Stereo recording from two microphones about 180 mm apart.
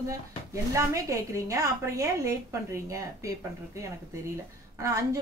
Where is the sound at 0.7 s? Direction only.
15° right (ahead or behind).